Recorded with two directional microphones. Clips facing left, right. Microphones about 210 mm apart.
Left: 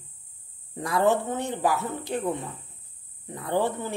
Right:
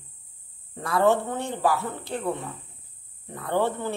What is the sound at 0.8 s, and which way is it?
Speech, 15° left (ahead or behind).